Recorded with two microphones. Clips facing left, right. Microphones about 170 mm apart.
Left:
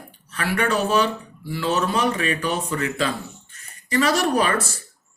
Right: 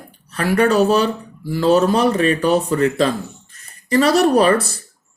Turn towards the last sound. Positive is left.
turn(degrees=-35)  # may be behind; listen again after turning